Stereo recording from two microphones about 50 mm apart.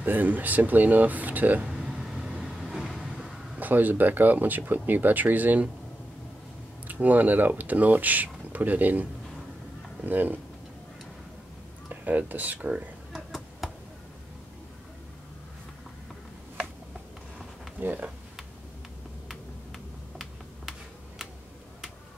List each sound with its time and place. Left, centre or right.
0.0 s speech: right
1.9 s vehicle: centre
2.6 s train: centre
3.5 s speech: right
6.9 s speech: right
10.0 s speech: right
11.9 s speech: right
13.6 s tick: centre
17.7 s a sound: right
19.2 s a sound: centre